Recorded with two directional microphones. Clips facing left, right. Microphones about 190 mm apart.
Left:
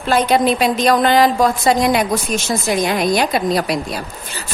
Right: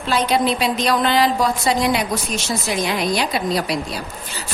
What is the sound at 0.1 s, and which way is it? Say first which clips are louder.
A woman's voice: left 4 dB; 50° left (ahead or behind).